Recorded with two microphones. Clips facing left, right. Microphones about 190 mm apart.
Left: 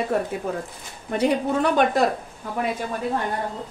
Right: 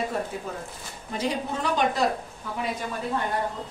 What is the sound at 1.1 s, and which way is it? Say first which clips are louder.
Speech: left 7 dB; 60° left (ahead or behind).